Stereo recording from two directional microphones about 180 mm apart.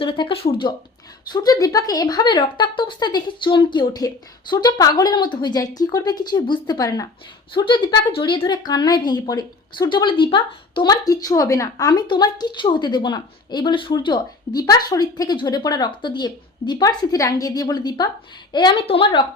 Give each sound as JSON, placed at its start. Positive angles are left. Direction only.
{"t": 0.0, "sound": "a woman's voice", "side_deg": 30}